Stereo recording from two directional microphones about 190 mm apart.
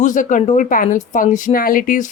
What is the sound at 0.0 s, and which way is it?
Speech, 45° left (ahead or behind).